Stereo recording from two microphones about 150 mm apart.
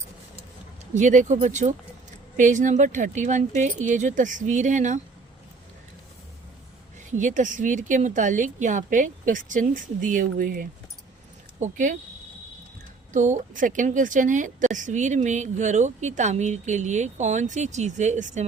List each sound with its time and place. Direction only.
0.9 s a woman's voice: 55° right (ahead or behind)
7.1 s a woman's voice: 55° right (ahead or behind)
11.6 s a woman's voice: 55° right (ahead or behind)
13.1 s a woman's voice: 55° right (ahead or behind)